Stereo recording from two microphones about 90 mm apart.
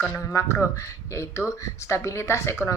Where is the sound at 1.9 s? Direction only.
30° left (ahead or behind).